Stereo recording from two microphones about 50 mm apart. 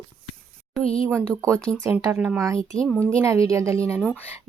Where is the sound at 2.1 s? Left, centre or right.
Right.